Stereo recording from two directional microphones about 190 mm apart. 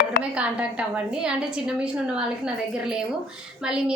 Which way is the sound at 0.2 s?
5° right (ahead or behind).